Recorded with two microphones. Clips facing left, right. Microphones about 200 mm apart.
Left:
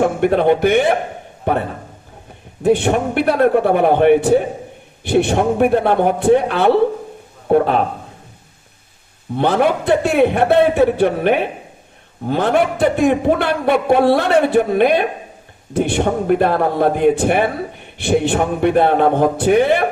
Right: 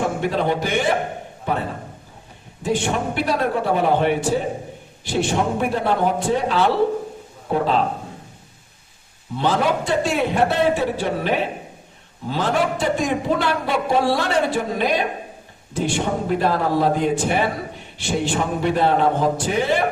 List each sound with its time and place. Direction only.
0.0 s a man's voice: 55° left (ahead or behind)
2.6 s a man's voice: 60° left (ahead or behind)
9.3 s a man's voice: 60° left (ahead or behind)